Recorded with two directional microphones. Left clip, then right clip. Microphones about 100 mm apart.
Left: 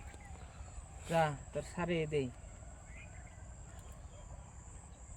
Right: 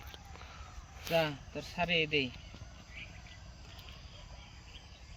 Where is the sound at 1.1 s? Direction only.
35° left (ahead or behind).